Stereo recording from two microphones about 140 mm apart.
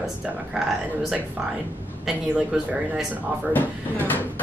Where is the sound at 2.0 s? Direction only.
5° right (ahead or behind).